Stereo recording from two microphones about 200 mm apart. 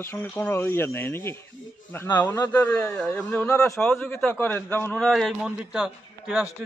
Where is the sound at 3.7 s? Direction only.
5° left (ahead or behind).